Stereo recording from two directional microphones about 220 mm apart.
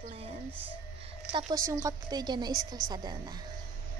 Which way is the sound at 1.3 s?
20° right (ahead or behind).